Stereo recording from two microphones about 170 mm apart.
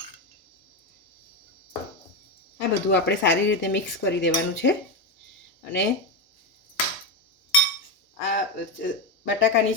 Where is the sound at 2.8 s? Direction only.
90° left.